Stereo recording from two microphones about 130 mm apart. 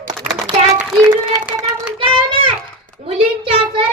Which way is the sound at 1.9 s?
45° right (ahead or behind).